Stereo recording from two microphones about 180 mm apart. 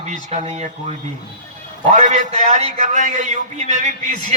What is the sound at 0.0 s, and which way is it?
A man's voice, 40° right (ahead or behind).